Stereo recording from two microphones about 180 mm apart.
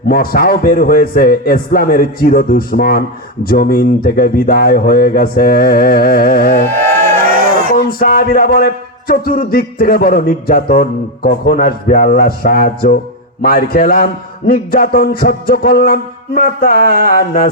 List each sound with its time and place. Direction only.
0.1 s a man's voice: 55° left (ahead or behind)
7.8 s a man's voice: 50° left (ahead or behind)